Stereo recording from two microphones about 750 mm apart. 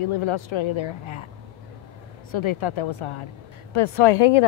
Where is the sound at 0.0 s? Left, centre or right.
Left.